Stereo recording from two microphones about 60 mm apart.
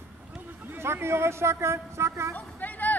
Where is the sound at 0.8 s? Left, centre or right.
Right.